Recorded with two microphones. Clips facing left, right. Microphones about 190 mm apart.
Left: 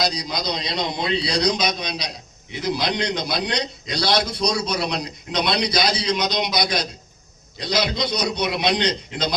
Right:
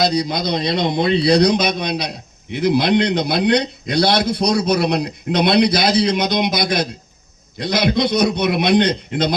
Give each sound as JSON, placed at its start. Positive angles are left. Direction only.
{"t": 0.0, "sound": "a man's voice", "side_deg": -55}